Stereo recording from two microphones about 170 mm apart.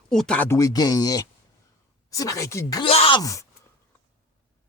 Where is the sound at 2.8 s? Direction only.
35° left (ahead or behind).